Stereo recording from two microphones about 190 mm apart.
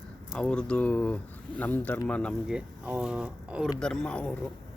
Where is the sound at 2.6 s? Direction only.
5° right (ahead or behind).